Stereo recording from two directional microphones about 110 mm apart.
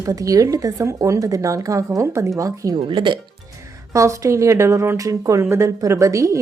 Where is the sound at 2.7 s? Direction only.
45° right (ahead or behind).